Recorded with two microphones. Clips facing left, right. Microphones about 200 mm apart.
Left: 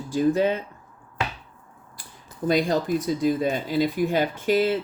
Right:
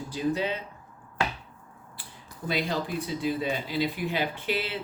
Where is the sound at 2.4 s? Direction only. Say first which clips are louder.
Left 8 dB; 45° left (ahead or behind).